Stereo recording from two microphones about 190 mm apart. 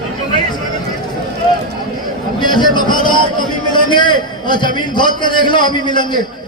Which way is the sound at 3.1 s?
25° left (ahead or behind).